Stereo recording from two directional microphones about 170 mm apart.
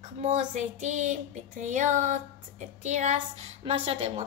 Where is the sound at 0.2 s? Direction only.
45° right (ahead or behind).